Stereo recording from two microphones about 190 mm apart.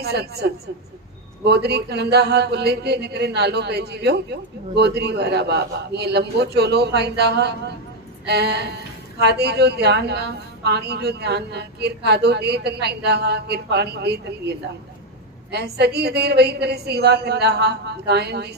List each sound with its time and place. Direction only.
0.0 s speech: 60° right (ahead or behind)
15.5 s speech: 60° right (ahead or behind)